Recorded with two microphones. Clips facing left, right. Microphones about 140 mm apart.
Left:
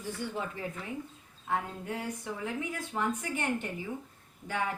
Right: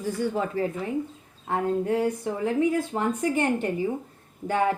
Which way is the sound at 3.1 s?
65° right (ahead or behind).